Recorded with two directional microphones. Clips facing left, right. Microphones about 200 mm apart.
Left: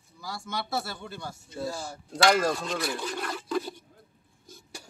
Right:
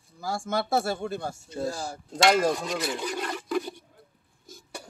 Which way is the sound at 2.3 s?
15° right (ahead or behind).